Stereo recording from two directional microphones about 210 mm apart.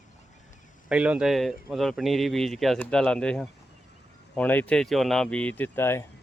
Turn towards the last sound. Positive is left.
turn(degrees=10)  # may be behind; listen again after turning